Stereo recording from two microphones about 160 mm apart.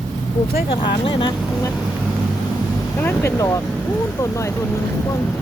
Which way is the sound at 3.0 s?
15° left (ahead or behind).